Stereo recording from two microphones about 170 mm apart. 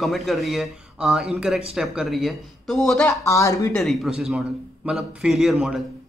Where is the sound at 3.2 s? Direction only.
20° left (ahead or behind).